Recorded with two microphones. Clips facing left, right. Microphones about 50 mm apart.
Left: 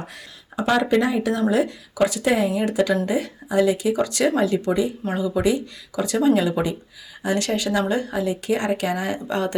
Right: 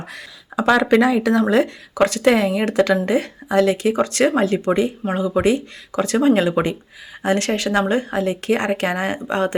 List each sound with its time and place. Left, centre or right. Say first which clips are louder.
0.1 s speech: right 5 dB; right
2.0 s speech: right 4 dB; right